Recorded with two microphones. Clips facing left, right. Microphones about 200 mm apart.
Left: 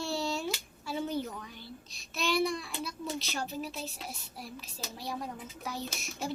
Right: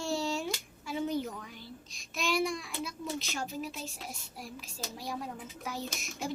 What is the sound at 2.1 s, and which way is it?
Speech, 10° right (ahead or behind).